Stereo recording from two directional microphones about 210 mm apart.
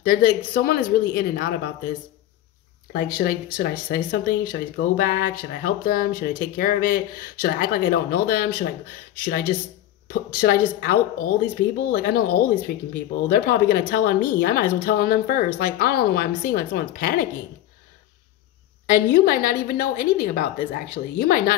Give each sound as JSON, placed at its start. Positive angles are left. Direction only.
{"t": 0.0, "sound": "speech", "side_deg": 45}
{"t": 2.9, "sound": "speech", "side_deg": 45}
{"t": 10.0, "sound": "speech", "side_deg": 45}
{"t": 19.1, "sound": "speech", "side_deg": 45}